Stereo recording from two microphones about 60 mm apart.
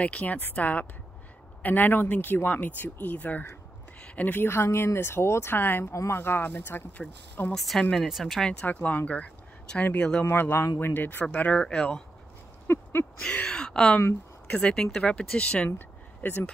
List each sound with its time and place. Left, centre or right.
0.0 s a woman's voice: left
7.5 s speech: centre
8.1 s speech: centre
8.8 s speech: left
10.2 s a woman's voice: left
11.6 s speech: centre
12.6 s a sound: left
13.5 s speech: centre
16.2 s speech: left